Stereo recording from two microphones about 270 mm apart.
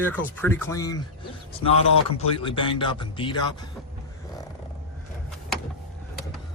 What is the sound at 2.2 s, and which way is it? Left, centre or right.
Speech, centre.